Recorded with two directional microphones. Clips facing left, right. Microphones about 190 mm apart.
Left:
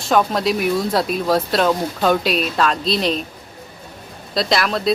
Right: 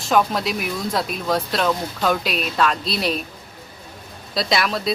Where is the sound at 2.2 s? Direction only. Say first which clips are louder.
Left 3 dB; centre (ahead or behind).